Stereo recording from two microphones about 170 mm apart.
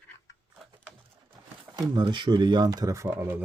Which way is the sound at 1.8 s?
25° right (ahead or behind).